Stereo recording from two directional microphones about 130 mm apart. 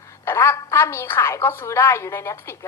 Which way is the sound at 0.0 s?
20° left (ahead or behind).